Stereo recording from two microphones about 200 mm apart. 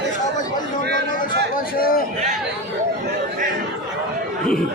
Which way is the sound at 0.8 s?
60° right (ahead or behind).